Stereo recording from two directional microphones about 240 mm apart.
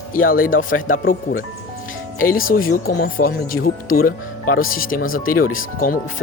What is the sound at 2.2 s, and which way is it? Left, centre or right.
Speech, left.